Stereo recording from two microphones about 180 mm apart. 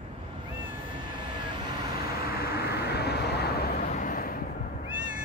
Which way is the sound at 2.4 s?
60° left (ahead or behind).